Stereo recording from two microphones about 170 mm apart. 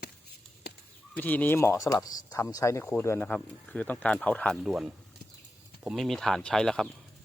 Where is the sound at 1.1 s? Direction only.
10° left (ahead or behind).